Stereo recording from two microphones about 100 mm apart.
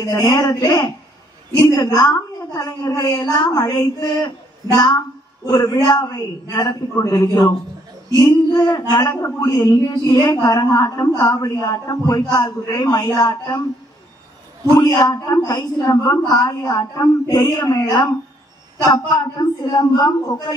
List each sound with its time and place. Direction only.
0.0 s a woman's voice: 30° left (ahead or behind)
5.5 s a woman's voice: 40° left (ahead or behind)
8.7 s a woman's voice: 40° left (ahead or behind)
14.8 s a woman's voice: 40° left (ahead or behind)